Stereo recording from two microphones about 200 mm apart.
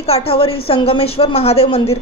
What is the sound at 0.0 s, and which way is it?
A woman's voice, 30° left (ahead or behind).